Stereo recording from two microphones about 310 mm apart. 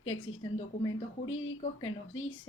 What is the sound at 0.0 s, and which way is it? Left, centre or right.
A woman's voice, left.